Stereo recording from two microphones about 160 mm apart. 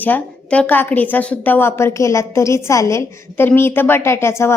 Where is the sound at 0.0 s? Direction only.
10° left (ahead or behind).